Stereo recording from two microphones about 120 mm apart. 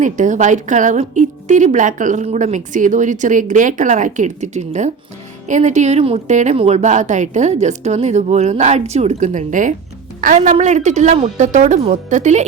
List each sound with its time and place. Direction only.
0.0 s a woman's voice: 90° right
6.6 s speech: 65° right (ahead or behind); by 9.7 s 90° right
10.5 s speech: 75° right (ahead or behind)